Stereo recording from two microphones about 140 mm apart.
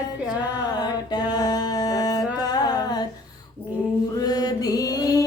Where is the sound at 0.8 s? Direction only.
30° left (ahead or behind).